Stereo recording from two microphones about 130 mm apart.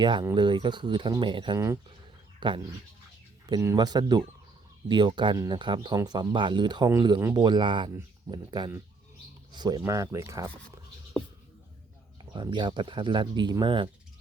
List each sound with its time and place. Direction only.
0.0 s speech: 35° right (ahead or behind)
1.5 s speech: 20° right (ahead or behind)
2.4 s speech: 35° right (ahead or behind)
12.3 s speech: 35° right (ahead or behind)